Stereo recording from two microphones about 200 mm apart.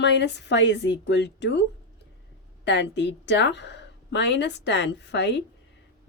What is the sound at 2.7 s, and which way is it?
A woman's voice, 60° left (ahead or behind).